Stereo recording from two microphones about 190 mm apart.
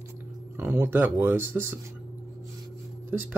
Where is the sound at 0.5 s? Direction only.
10° right (ahead or behind).